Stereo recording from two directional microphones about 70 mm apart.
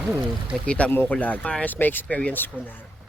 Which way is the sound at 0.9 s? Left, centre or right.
Left.